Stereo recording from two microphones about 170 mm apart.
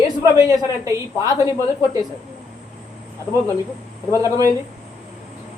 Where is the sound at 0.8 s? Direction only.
20° right (ahead or behind).